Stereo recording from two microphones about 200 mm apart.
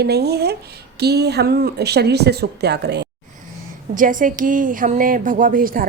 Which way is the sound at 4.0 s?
40° right (ahead or behind).